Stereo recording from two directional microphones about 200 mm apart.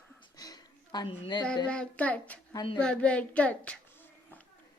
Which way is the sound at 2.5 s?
20° left (ahead or behind).